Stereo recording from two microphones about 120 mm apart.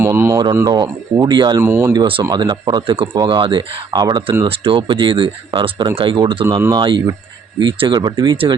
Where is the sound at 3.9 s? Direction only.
35° right (ahead or behind).